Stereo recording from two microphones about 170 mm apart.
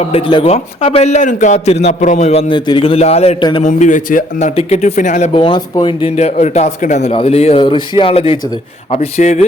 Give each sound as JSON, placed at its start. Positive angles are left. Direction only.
{"t": 0.0, "sound": "a man's voice", "side_deg": 35}
{"t": 3.6, "sound": "speech", "side_deg": 50}
{"t": 5.3, "sound": "a man's voice", "side_deg": 30}